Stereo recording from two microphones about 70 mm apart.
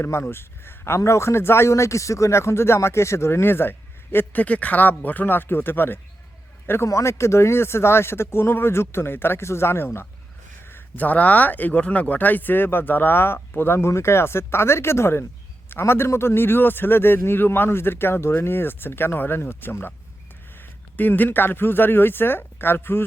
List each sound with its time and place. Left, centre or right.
0.0 s a man's voice: left
6.8 s a man's voice: left